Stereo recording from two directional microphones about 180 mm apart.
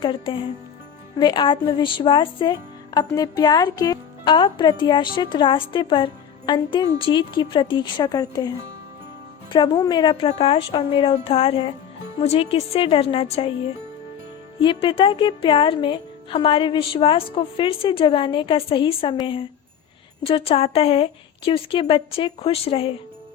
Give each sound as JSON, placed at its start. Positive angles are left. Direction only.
{"t": 0.0, "sound": "speech", "side_deg": 30}
{"t": 14.6, "sound": "speech", "side_deg": 30}